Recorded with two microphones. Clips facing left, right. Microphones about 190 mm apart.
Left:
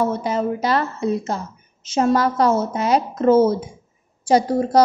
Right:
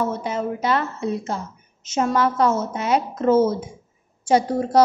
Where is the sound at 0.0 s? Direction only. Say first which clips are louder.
Left 3 dB; 35° left (ahead or behind).